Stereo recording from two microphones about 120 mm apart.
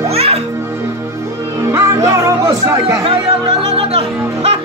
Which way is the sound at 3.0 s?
50° right (ahead or behind).